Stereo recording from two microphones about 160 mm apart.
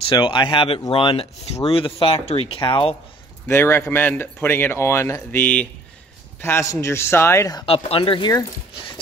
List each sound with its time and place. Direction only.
0.1 s speech: 30° left (ahead or behind)
3.4 s speech: 15° left (ahead or behind)
7.6 s speech: 35° left (ahead or behind)